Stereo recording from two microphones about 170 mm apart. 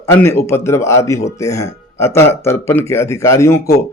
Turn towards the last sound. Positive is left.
turn(degrees=15)  # may be behind; listen again after turning